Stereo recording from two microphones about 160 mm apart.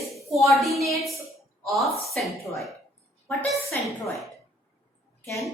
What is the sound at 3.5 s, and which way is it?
Speech, centre (ahead or behind).